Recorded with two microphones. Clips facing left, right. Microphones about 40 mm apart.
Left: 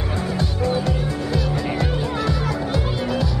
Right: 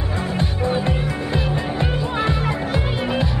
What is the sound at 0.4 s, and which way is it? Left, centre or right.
Music, right.